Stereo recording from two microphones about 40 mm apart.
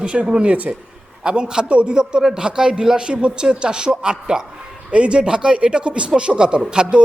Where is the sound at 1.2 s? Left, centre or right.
Right.